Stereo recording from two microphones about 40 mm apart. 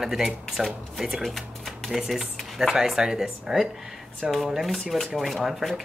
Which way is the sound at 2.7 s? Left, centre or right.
Centre.